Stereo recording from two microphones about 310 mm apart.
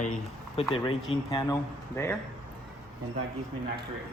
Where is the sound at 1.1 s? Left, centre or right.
Centre.